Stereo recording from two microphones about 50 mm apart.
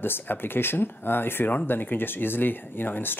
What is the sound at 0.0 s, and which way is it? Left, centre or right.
Speech, left.